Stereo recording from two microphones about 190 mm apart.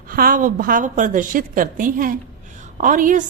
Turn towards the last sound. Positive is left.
turn(degrees=-45)  # may be behind; listen again after turning